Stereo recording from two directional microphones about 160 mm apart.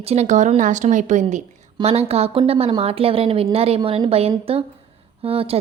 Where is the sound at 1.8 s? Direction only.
40° right (ahead or behind).